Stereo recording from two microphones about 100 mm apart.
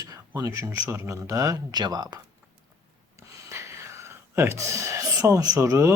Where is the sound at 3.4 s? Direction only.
30° right (ahead or behind).